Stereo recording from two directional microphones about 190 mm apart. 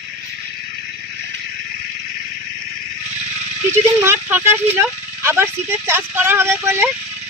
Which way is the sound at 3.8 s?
15° right (ahead or behind).